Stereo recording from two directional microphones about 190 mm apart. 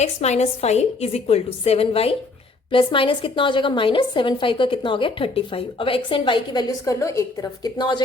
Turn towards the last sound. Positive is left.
turn(degrees=25)  # may be behind; listen again after turning